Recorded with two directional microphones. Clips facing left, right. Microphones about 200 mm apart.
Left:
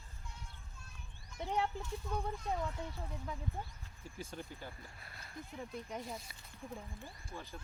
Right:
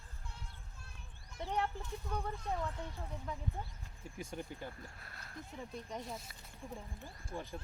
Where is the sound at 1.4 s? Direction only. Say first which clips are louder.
Left 1 dB; 10° left (ahead or behind).